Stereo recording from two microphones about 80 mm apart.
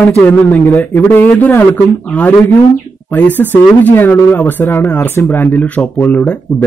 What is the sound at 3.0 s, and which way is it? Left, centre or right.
Speech, centre.